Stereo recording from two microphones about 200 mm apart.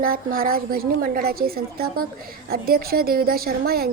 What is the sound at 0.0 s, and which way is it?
A woman's voice, 45° right (ahead or behind).